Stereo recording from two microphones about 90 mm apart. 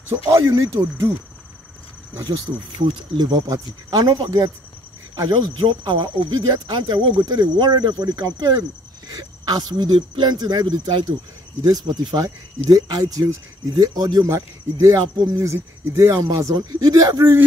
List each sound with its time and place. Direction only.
0.3 s speech: 35° right (ahead or behind)
2.8 s speech: 50° right (ahead or behind)
5.5 s speech: 60° right (ahead or behind)
11.6 s speech: 45° right (ahead or behind)